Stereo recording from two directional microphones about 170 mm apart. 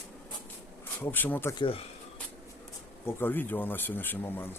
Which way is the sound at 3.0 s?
10° left (ahead or behind).